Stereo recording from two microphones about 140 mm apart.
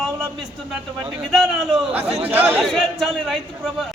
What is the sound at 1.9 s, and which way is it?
Speech, 10° right (ahead or behind).